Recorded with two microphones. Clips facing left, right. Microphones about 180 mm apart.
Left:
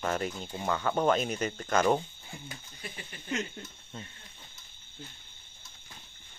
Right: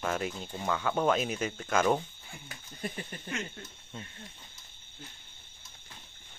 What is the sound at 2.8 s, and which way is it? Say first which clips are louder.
Speech: right 7 dB; 45° right (ahead or behind).